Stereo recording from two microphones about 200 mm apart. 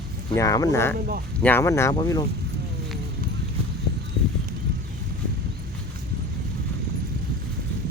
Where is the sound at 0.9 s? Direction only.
45° right (ahead or behind).